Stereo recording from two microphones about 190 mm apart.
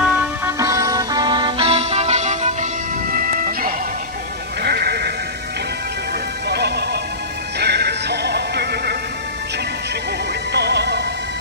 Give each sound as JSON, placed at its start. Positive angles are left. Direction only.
{"t": 0.0, "sound": "music", "side_deg": -15}
{"t": 6.5, "sound": "music", "side_deg": -60}
{"t": 10.5, "sound": "music", "side_deg": -60}